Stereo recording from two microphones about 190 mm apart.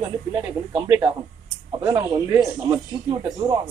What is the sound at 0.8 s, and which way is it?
Speech, 25° right (ahead or behind).